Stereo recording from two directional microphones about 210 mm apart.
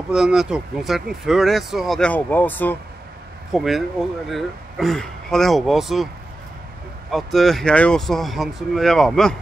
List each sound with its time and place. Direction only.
0.1 s speech: 5° right (ahead or behind)
7.1 s speech: centre (ahead or behind)